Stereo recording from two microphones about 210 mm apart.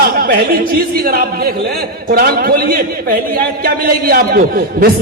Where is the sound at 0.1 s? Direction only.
45° right (ahead or behind).